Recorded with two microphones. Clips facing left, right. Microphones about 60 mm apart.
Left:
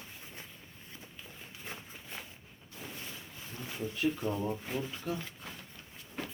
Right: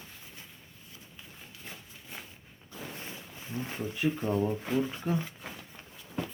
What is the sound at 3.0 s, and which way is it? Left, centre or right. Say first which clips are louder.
Speech: right 3 dB; right.